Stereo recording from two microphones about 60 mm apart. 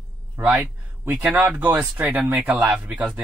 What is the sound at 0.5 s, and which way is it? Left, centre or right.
Speech, right.